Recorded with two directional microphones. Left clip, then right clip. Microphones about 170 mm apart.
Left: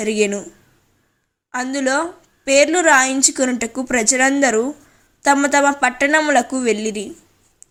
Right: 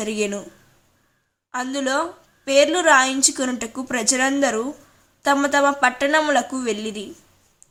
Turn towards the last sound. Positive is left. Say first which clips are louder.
# left 6 dB
turn(degrees=20)  # may be behind; listen again after turning